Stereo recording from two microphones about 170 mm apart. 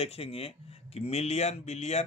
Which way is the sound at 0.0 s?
35° left (ahead or behind).